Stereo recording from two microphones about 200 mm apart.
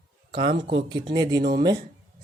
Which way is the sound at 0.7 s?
25° right (ahead or behind).